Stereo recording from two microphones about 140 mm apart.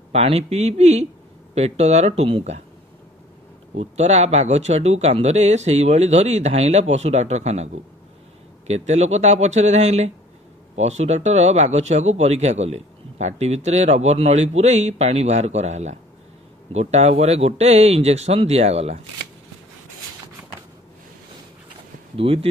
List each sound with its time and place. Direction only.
0.1 s speech: 45° right (ahead or behind)
3.7 s speech: 50° right (ahead or behind)
22.1 s speech: 45° right (ahead or behind)